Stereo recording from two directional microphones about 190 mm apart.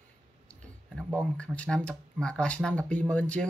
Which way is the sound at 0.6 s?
5° left (ahead or behind).